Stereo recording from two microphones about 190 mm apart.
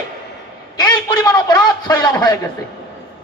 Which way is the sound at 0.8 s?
20° left (ahead or behind).